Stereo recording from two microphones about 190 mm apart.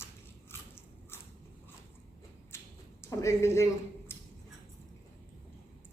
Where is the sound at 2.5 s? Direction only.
15° left (ahead or behind).